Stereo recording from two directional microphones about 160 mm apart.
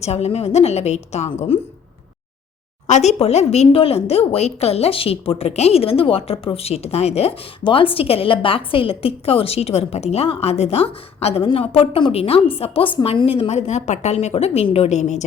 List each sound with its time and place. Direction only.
0.0 s a woman's voice: 40° left (ahead or behind)
2.8 s speech: 45° left (ahead or behind)